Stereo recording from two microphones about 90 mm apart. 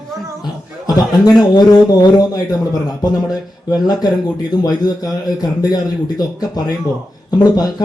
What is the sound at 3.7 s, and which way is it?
Speech, 50° left (ahead or behind).